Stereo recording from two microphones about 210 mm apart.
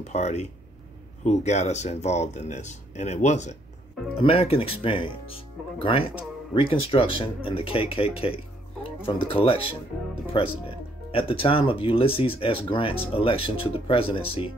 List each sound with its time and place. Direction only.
0.0 s speech: 35° left (ahead or behind)